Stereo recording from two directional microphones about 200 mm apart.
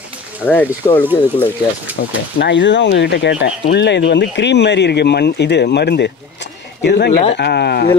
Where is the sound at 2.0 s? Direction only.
55° left (ahead or behind).